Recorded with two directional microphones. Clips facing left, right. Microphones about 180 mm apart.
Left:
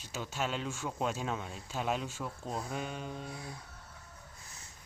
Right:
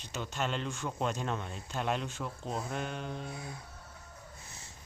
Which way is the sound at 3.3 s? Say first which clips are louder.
Right 1 dB; 20° right (ahead or behind).